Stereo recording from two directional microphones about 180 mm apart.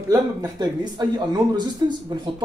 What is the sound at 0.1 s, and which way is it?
Speech, 20° right (ahead or behind).